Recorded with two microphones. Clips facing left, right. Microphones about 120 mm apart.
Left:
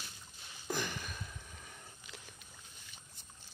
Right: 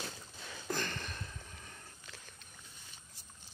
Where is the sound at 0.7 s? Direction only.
10° left (ahead or behind).